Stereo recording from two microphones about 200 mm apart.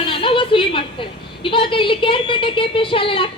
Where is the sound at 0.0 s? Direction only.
25° left (ahead or behind).